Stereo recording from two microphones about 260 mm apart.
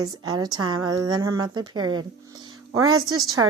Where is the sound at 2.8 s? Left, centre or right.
Right.